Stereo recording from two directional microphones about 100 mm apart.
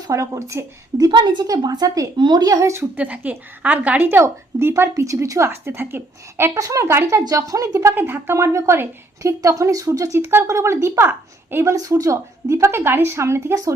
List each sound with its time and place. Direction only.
0.1 s a woman's voice: 30° right (ahead or behind)
2.7 s a woman's voice: 20° right (ahead or behind)
6.5 s a woman's voice: 35° right (ahead or behind)
7.3 s a woman's voice: 35° right (ahead or behind)